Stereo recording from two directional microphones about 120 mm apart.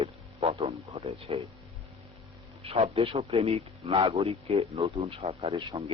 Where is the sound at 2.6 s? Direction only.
60° right (ahead or behind).